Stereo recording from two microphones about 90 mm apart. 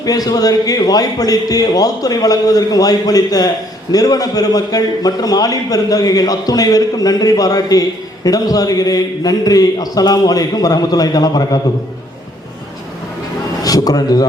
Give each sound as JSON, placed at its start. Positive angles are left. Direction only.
{"t": 0.0, "sound": "a man's voice", "side_deg": 45}
{"t": 13.6, "sound": "a man's voice", "side_deg": 45}